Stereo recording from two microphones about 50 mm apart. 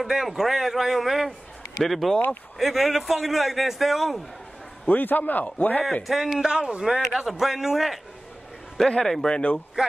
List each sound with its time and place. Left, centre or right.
0.0 s a man's voice: centre
4.8 s a man's voice: left
6.0 s a man's voice: centre
6.5 s a man's voice: right
7.2 s a man's voice: centre
8.7 s a man's voice: centre
9.8 s speech: centre